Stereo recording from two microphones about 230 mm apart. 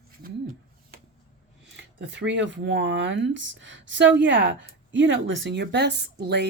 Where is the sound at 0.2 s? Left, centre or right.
Right.